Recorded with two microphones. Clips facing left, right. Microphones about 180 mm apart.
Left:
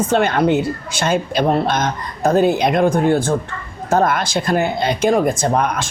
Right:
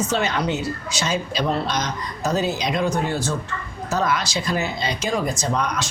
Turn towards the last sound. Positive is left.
turn(degrees=50)  # may be behind; listen again after turning